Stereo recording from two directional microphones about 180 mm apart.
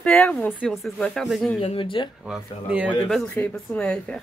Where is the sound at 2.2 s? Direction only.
5° right (ahead or behind).